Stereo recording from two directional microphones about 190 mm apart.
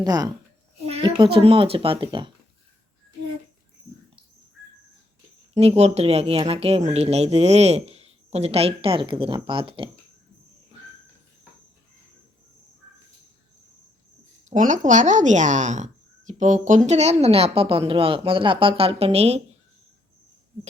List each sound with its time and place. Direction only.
0.0 s a child's voice: 20° right (ahead or behind)
5.5 s speech: 35° right (ahead or behind)
14.5 s speech: 40° right (ahead or behind)